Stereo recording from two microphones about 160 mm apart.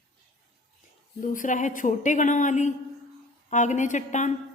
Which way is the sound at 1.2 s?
55° left (ahead or behind).